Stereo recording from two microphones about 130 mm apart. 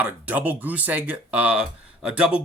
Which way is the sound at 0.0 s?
10° right (ahead or behind).